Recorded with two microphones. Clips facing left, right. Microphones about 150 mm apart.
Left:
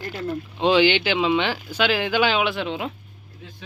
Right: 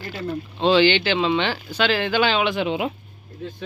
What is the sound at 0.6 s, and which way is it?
Speech, 10° left (ahead or behind).